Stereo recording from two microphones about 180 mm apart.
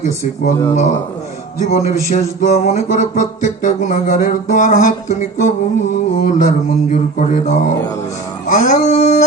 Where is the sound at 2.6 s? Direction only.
40° left (ahead or behind).